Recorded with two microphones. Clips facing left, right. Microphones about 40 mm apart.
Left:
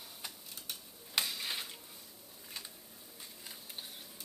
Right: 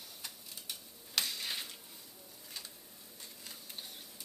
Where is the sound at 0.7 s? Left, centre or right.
Centre.